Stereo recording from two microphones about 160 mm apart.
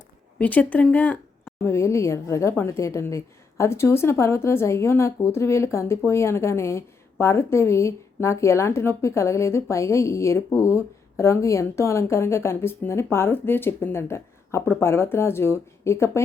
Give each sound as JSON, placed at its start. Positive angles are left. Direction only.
{"t": 0.3, "sound": "a woman's voice", "side_deg": 10}